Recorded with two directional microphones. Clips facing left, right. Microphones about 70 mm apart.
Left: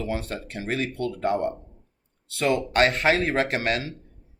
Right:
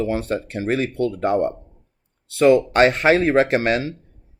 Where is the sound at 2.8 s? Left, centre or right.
Right.